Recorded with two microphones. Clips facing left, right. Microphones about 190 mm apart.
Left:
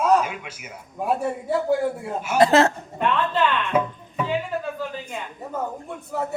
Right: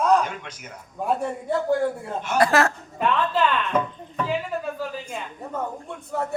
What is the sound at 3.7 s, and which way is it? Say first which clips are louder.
Music: left 2 dB; 5° left (ahead or behind).